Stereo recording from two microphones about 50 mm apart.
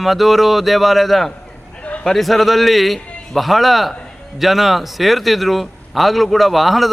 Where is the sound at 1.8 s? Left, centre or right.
Left.